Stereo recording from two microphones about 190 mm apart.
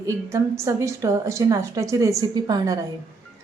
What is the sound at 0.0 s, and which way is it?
A woman's voice, 15° right (ahead or behind).